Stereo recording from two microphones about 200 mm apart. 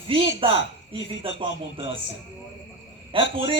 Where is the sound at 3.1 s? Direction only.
25° right (ahead or behind).